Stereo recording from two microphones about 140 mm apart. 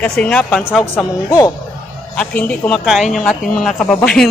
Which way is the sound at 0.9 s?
20° left (ahead or behind).